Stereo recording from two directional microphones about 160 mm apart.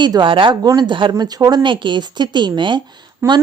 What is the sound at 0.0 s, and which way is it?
A woman's voice, 30° right (ahead or behind).